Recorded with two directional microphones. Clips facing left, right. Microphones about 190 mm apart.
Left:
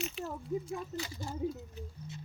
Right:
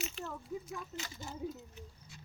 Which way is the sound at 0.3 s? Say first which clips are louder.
Left 6 dB; 30° left (ahead or behind).